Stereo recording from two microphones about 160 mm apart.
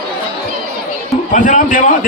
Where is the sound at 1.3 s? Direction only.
55° left (ahead or behind).